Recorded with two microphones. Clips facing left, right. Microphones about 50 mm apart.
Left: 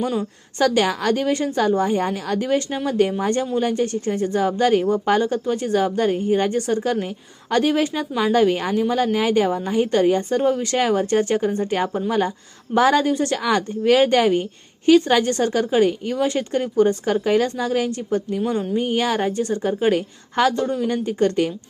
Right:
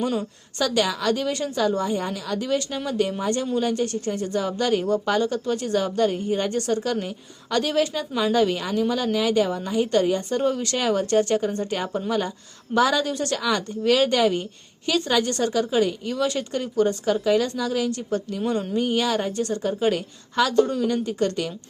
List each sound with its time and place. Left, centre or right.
0.6 s a woman's voice: left
12.7 s a woman's voice: left
18.3 s speech: centre
18.8 s a woman's voice: left
20.5 s a woman's voice: left